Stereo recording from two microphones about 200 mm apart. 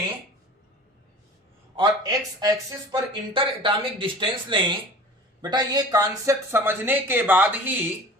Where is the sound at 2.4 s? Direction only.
20° right (ahead or behind).